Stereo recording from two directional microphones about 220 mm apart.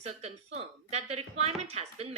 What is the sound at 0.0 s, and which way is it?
A woman's voice, 30° right (ahead or behind).